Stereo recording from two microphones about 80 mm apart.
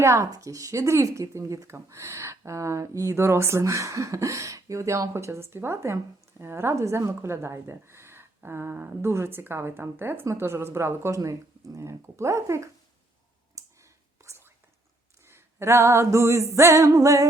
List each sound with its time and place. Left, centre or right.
0.0 s a woman's voice: right
13.6 s whispering: right
15.3 s a woman's voice: right